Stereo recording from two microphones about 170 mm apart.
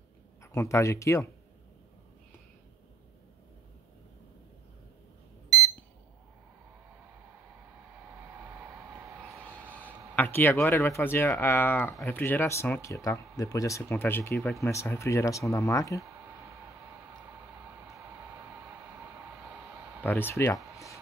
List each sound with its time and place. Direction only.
0.4 s speech: 15° left (ahead or behind)
9.8 s speech: 10° left (ahead or behind)
16.0 s a sound: 20° right (ahead or behind)
20.0 s speech: 10° left (ahead or behind)